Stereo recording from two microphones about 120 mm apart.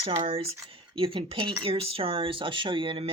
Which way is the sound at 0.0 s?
60° right (ahead or behind).